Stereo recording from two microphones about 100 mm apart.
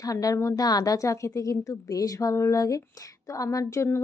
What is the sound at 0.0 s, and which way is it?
A woman's voice, 35° left (ahead or behind).